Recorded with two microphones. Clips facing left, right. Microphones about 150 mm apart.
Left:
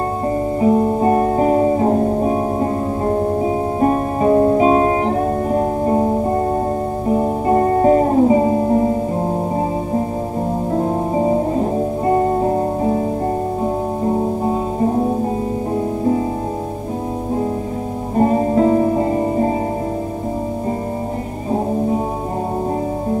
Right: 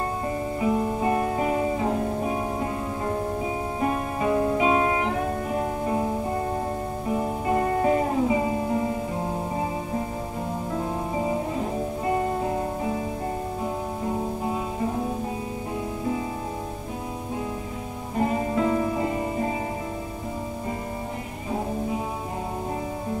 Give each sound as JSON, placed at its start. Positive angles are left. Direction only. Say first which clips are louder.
{"t": 0.6, "sound": "music", "louder": "left 9 dB", "side_deg": 40}
{"t": 10.7, "sound": "music", "louder": "left 10 dB", "side_deg": 40}
{"t": 14.0, "sound": "music", "louder": "left 9 dB", "side_deg": 40}
{"t": 18.1, "sound": "music", "louder": "left 9 dB", "side_deg": 40}
{"t": 21.5, "sound": "music", "louder": "left 9 dB", "side_deg": 40}